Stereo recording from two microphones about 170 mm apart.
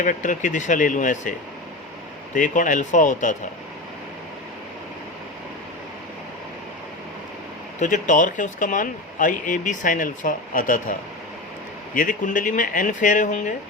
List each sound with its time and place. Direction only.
0.0 s speech: 50° left (ahead or behind)
2.3 s speech: 50° left (ahead or behind)
7.8 s speech: 45° left (ahead or behind)
11.9 s speech: 50° left (ahead or behind)